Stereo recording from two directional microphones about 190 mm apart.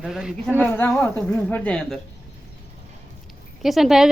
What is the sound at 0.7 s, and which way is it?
Speech, 10° left (ahead or behind).